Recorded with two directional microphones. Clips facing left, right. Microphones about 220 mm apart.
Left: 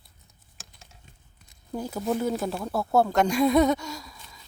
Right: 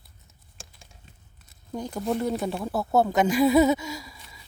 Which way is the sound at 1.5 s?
5° left (ahead or behind).